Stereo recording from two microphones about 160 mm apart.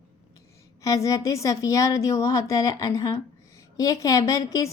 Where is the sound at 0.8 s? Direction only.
20° left (ahead or behind).